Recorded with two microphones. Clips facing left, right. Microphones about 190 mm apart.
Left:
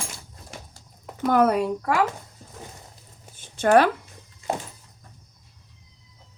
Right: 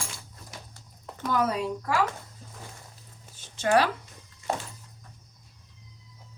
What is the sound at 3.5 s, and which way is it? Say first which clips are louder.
Speech: left 6 dB; 55° left (ahead or behind).